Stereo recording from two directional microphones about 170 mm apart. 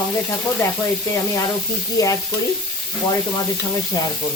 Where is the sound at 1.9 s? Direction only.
20° left (ahead or behind).